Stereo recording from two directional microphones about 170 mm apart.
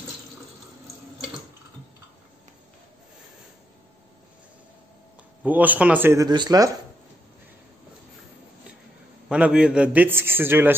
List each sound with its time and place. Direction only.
5.4 s a man's voice: 10° right (ahead or behind)
6.2 s speech: 25° right (ahead or behind)
9.3 s a man's voice: 5° right (ahead or behind)